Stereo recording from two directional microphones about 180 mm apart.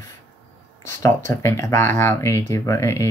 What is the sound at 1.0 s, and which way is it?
Speech, 15° left (ahead or behind).